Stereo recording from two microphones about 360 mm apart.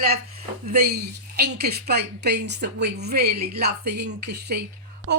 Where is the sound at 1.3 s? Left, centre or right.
Right.